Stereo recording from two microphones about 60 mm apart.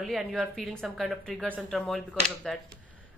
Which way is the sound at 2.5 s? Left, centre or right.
Centre.